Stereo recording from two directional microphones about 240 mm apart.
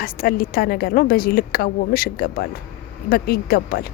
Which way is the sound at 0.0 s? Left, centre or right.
Left.